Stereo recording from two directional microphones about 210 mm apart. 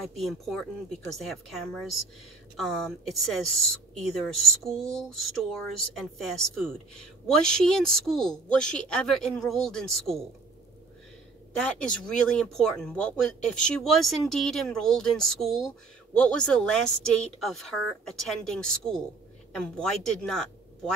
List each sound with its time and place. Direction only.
0.1 s speech: centre (ahead or behind)
11.6 s speech: 5° left (ahead or behind)